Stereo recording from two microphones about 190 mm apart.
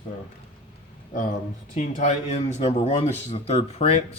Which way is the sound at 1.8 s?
35° left (ahead or behind).